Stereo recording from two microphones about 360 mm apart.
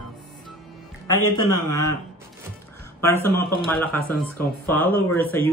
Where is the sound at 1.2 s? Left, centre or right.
Left.